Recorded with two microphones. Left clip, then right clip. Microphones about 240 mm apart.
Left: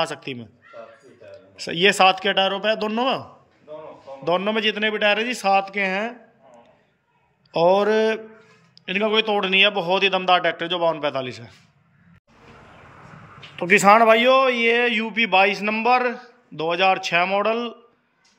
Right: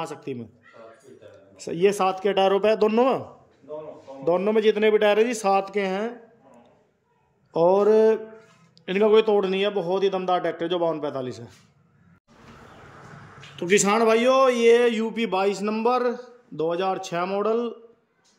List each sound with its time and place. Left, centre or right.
1.9 s a man's voice: centre
2.1 s a man's voice: centre
7.5 s a man's voice: centre
13.6 s a man's voice: centre